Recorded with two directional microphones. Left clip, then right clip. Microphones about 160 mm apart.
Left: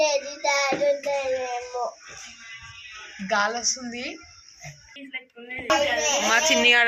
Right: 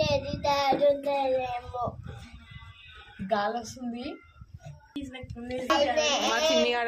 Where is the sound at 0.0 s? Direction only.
40° left (ahead or behind).